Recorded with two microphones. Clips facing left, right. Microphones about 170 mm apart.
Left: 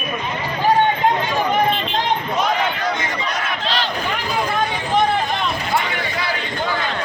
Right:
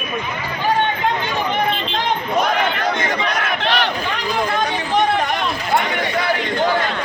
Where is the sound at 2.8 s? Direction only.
70° right (ahead or behind).